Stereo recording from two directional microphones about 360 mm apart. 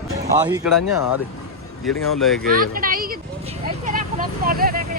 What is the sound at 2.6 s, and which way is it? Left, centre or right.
Vehicle, right.